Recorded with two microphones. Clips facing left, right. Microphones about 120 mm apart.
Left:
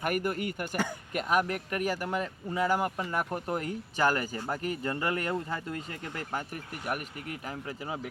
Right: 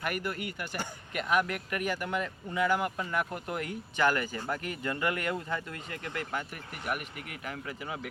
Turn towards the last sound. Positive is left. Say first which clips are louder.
# left 1 dB
turn(degrees=35)  # may be behind; listen again after turning